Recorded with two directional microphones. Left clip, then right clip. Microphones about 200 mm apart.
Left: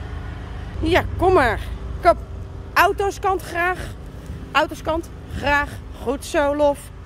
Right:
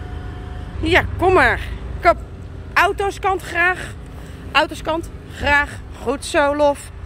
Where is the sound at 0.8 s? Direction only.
15° left (ahead or behind).